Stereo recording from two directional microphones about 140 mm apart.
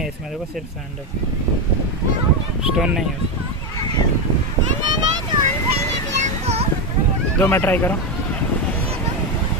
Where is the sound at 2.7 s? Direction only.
5° right (ahead or behind).